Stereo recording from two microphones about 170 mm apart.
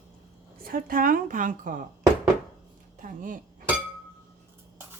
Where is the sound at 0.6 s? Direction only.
55° right (ahead or behind).